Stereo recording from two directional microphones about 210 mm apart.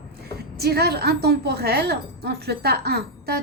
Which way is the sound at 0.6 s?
50° right (ahead or behind).